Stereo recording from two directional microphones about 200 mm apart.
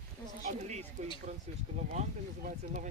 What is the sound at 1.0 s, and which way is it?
Speech, 35° right (ahead or behind).